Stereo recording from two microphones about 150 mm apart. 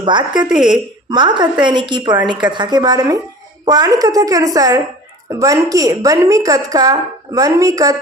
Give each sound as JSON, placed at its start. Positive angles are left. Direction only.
{"t": 0.0, "sound": "a woman's voice", "side_deg": -30}
{"t": 0.4, "sound": "a woman's voice", "side_deg": -5}
{"t": 1.1, "sound": "a woman's voice", "side_deg": -30}